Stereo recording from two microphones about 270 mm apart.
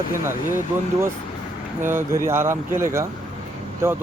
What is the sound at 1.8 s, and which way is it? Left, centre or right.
Speech, centre.